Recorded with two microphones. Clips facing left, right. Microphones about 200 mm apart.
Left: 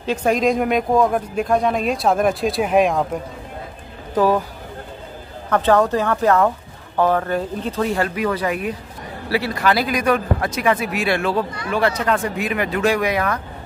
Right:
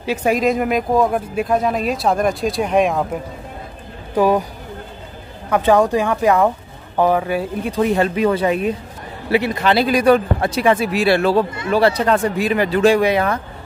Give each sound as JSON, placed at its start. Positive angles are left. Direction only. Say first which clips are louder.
{"t": 0.0, "sound": "speech", "louder": "right 1 dB", "side_deg": -10}
{"t": 4.1, "sound": "speech", "louder": "right 2 dB", "side_deg": -15}
{"t": 5.5, "sound": "a man's voice", "louder": "right 2 dB", "side_deg": -10}